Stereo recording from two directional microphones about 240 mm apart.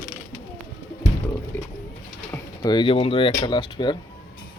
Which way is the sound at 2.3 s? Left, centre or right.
Centre.